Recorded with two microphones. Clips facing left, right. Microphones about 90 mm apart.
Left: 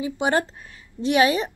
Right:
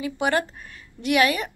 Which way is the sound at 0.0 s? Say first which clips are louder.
Left 1 dB; 20° left (ahead or behind).